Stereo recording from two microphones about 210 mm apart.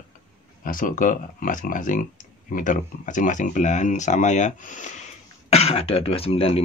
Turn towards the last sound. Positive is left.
turn(degrees=25)  # may be behind; listen again after turning